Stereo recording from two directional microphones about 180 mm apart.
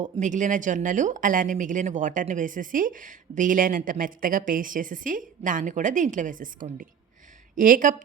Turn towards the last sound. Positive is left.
turn(degrees=-45)  # may be behind; listen again after turning